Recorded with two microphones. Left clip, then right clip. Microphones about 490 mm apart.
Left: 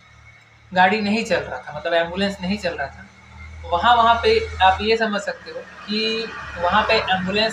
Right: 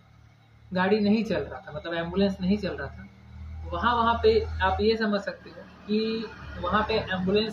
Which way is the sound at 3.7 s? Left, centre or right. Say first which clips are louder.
Left 9 dB; right.